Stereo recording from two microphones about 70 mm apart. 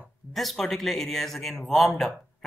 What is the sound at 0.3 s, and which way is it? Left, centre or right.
A man's voice, centre.